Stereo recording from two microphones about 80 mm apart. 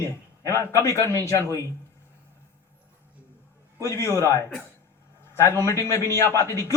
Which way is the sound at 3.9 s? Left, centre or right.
Left.